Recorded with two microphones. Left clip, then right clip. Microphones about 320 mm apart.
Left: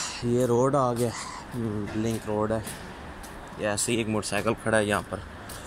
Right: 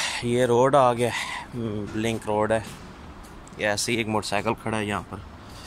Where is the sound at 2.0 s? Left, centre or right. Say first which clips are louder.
Right 5 dB; right.